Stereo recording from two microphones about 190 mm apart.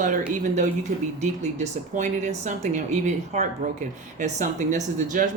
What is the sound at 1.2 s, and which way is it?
Speech, 35° right (ahead or behind).